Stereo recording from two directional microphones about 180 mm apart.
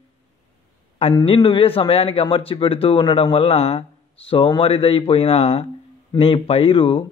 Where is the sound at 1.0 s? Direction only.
30° left (ahead or behind).